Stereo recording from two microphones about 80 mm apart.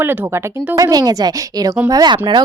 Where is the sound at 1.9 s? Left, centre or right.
Right.